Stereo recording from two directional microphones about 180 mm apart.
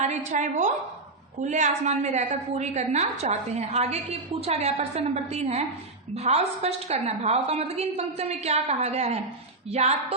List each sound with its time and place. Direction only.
0.0 s a woman's voice: 40° right (ahead or behind)